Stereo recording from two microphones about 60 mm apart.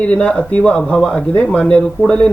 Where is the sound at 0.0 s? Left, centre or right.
Centre.